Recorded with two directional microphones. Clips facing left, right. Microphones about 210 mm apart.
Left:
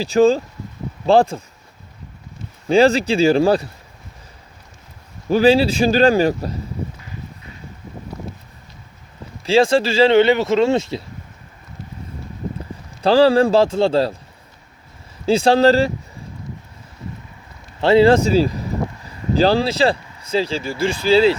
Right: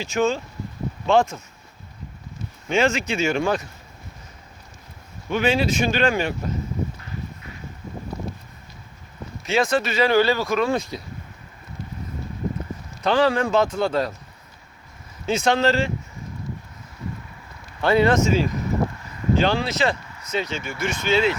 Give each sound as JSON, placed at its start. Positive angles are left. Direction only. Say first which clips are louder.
{"t": 0.0, "sound": "speech", "louder": "left 8 dB", "side_deg": 35}
{"t": 2.6, "sound": "speech", "louder": "left 7 dB", "side_deg": 35}
{"t": 5.3, "sound": "speech", "louder": "left 7 dB", "side_deg": 35}
{"t": 9.4, "sound": "speech", "louder": "left 7 dB", "side_deg": 30}
{"t": 13.0, "sound": "speech", "louder": "left 7 dB", "side_deg": 30}
{"t": 15.3, "sound": "speech", "louder": "left 7 dB", "side_deg": 30}
{"t": 17.7, "sound": "speech", "louder": "left 6 dB", "side_deg": 30}